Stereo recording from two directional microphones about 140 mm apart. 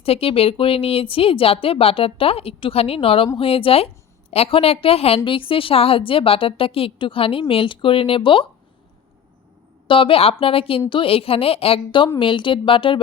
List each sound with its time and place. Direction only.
0.0 s a woman's voice: 45° left (ahead or behind)
9.8 s a woman's voice: 40° left (ahead or behind)